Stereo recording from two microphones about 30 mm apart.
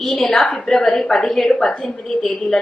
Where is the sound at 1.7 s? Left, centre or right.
Left.